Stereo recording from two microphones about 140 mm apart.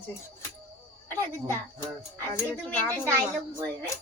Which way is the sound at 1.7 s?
20° left (ahead or behind).